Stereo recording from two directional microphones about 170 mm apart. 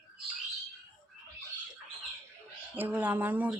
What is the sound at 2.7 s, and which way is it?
Speech, 10° right (ahead or behind).